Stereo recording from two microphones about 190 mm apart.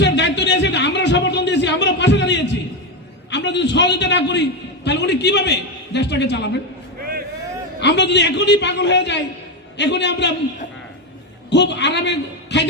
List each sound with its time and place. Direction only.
0.0 s a sound: 65° left (ahead or behind)
3.2 s a man's voice: 65° left (ahead or behind)
7.0 s vehicle: 50° right (ahead or behind)
7.8 s a man's voice: 65° left (ahead or behind)
11.5 s a man's voice: 65° left (ahead or behind)